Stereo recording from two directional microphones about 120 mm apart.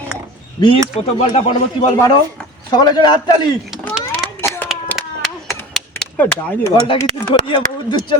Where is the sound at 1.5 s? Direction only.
30° left (ahead or behind).